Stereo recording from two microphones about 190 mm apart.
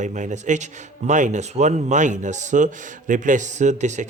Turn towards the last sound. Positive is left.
turn(degrees=-40)  # may be behind; listen again after turning